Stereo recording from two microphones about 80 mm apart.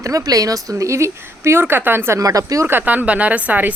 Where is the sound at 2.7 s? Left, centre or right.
Right.